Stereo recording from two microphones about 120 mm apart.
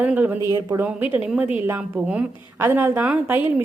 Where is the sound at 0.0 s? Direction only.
15° right (ahead or behind).